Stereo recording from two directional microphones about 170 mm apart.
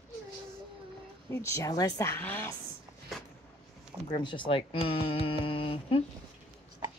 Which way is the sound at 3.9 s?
15° right (ahead or behind).